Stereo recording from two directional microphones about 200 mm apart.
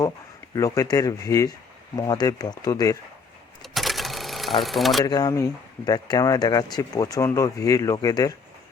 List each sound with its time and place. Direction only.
0.5 s speech: 15° left (ahead or behind)
3.6 s sewing machine: centre (ahead or behind)
4.6 s speech: centre (ahead or behind)
5.0 s speech: 20° left (ahead or behind)